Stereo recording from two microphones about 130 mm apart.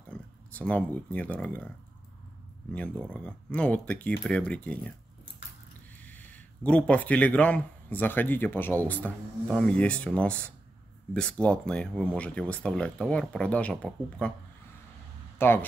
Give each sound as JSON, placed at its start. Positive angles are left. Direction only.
{"t": 0.1, "sound": "speech", "side_deg": 10}
{"t": 2.7, "sound": "speech", "side_deg": 10}
{"t": 6.0, "sound": "speech", "side_deg": 10}
{"t": 15.3, "sound": "speech", "side_deg": 15}